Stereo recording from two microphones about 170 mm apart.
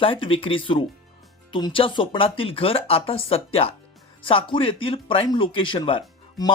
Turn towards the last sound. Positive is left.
turn(degrees=30)  # may be behind; listen again after turning